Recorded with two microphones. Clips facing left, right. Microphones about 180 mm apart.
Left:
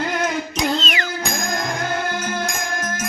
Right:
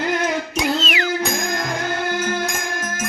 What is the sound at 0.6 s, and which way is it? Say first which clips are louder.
Music: even; 5° right (ahead or behind).